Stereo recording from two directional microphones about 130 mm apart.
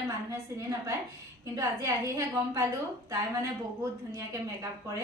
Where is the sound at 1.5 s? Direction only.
25° right (ahead or behind).